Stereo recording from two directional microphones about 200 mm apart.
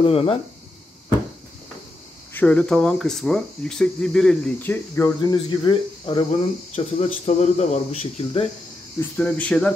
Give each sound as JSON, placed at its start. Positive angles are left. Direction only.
{"t": 0.0, "sound": "speech", "side_deg": 30}
{"t": 2.3, "sound": "speech", "side_deg": 5}
{"t": 9.1, "sound": "speech", "side_deg": 5}